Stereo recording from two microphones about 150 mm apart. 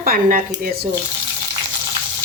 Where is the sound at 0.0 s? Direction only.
60° right (ahead or behind).